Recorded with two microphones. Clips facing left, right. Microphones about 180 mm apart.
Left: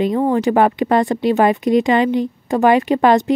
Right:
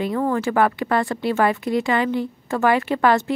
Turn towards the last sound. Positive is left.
turn(degrees=20)  # may be behind; listen again after turning